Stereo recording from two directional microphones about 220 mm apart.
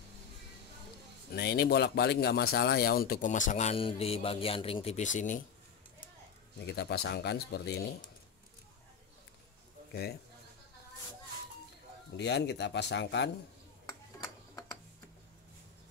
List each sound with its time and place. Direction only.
1.3 s speech: 45° left (ahead or behind)
6.6 s speech: 50° left (ahead or behind)
12.2 s speech: 50° left (ahead or behind)